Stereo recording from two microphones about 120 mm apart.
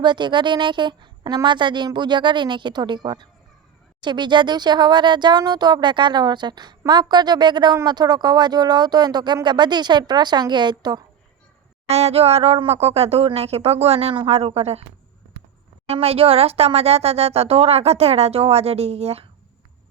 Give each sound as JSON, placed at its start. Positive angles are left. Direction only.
{"t": 0.0, "sound": "speech", "side_deg": -40}
{"t": 11.9, "sound": "speech", "side_deg": -60}
{"t": 15.9, "sound": "speech", "side_deg": -55}